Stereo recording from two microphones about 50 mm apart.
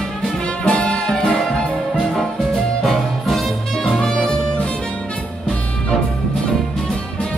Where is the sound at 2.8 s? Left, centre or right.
Centre.